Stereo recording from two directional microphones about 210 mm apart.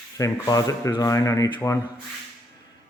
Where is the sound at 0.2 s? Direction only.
15° left (ahead or behind).